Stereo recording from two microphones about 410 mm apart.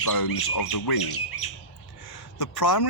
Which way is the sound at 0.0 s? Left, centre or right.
Left.